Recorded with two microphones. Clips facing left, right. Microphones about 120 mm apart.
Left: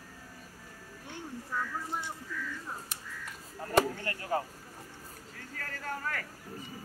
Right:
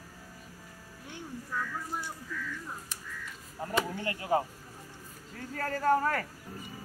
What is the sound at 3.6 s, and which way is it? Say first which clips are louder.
Speech: left 3 dB; 20° right (ahead or behind).